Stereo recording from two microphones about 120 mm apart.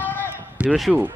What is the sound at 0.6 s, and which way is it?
Speech, 10° right (ahead or behind).